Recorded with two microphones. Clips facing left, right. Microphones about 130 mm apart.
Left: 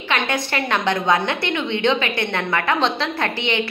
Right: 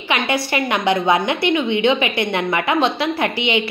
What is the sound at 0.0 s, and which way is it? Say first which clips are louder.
A woman's voice: right 2 dB; 10° right (ahead or behind).